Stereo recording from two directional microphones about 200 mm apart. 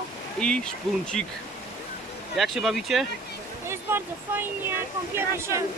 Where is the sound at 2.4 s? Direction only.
Centre (ahead or behind).